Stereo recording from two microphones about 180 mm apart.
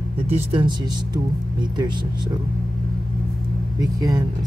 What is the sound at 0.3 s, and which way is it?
Speech, 30° right (ahead or behind).